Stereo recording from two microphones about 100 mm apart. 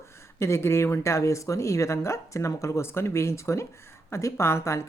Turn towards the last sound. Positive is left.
turn(degrees=30)  # may be behind; listen again after turning